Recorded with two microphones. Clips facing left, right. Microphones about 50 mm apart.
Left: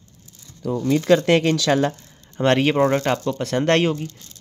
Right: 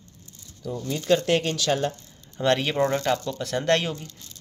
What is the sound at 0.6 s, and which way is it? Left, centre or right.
Speech, left.